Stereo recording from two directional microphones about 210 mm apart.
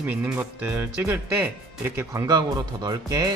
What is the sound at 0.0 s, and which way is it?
Speech, 10° right (ahead or behind).